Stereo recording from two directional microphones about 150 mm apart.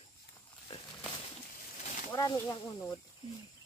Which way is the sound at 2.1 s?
25° left (ahead or behind).